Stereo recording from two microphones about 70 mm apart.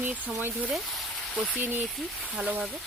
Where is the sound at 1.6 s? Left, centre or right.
Right.